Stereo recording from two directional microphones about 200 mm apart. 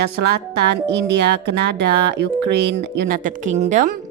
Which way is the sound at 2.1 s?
55° right (ahead or behind).